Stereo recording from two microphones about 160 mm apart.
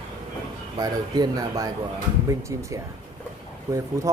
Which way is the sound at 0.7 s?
25° right (ahead or behind).